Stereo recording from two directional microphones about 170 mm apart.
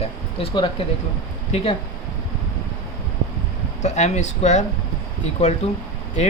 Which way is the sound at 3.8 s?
45° left (ahead or behind).